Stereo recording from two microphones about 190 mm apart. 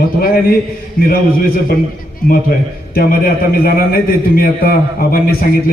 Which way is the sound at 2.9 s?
50° left (ahead or behind).